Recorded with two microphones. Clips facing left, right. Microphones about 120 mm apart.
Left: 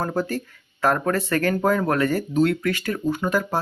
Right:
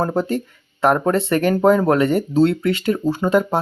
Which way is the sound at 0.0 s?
25° right (ahead or behind).